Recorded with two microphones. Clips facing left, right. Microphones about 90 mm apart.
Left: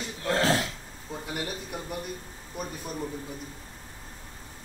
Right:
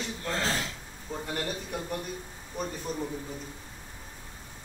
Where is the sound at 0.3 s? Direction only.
75° left (ahead or behind).